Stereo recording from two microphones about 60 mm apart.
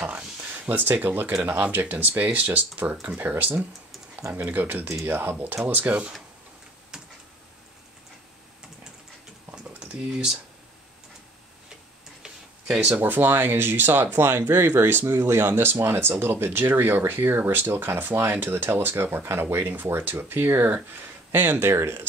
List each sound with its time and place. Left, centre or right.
0.0 s speech: right
6.9 s a sound: centre
9.6 s typing: centre
12.2 s tick-tock: centre
12.8 s speech: right